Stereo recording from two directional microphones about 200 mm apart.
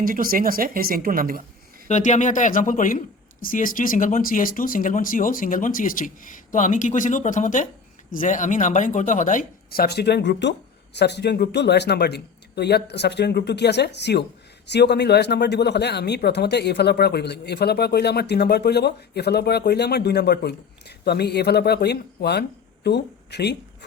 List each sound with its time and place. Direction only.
0.0 s speech: 45° right (ahead or behind)
1.9 s speech: 35° left (ahead or behind); by 23.6 s 55° left (ahead or behind)